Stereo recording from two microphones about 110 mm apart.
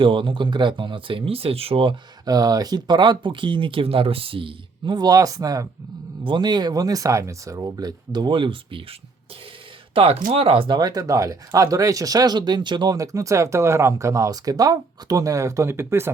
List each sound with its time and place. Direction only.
0.0 s speech: 50° right (ahead or behind)
2.2 s speech: 35° right (ahead or behind)
6.2 s speech: 45° right (ahead or behind)
10.8 s speech: 35° right (ahead or behind)